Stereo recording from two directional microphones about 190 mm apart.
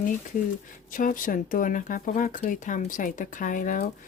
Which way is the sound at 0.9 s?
45° left (ahead or behind).